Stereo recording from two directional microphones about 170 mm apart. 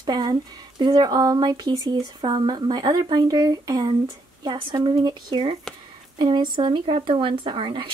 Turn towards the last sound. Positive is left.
turn(degrees=-30)  # may be behind; listen again after turning